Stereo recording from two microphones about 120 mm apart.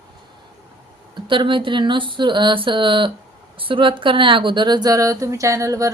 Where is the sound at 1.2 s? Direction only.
45° right (ahead or behind); by 5.8 s 25° right (ahead or behind).